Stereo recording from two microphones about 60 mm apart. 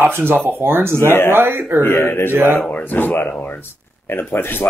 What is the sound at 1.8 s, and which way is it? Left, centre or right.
Speech, left.